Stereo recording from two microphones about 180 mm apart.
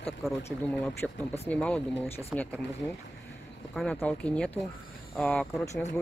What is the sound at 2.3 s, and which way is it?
Speech, 5° right (ahead or behind).